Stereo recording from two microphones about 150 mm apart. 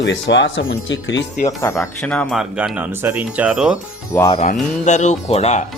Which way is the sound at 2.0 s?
5° left (ahead or behind).